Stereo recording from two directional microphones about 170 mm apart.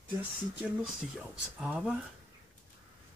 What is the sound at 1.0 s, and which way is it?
Speech, centre (ahead or behind).